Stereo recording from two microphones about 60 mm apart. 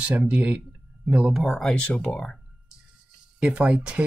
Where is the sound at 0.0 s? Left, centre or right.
Right.